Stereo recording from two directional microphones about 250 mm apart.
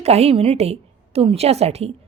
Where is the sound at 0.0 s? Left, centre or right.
Right.